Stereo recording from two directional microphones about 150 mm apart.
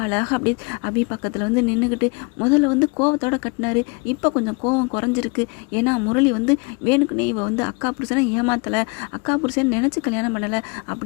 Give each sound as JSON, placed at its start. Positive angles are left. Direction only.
{"t": 0.0, "sound": "speech", "side_deg": 15}